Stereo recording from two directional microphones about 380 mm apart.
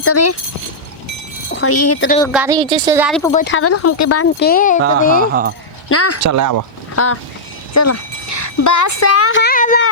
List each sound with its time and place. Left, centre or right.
0.0 s speech: left
1.5 s speech: left
2.0 s speech: centre
2.3 s speech: centre
3.3 s speech: left
4.4 s speech: left
5.3 s speech: right
5.9 s speech: left
6.1 s speech: right
6.9 s speech: left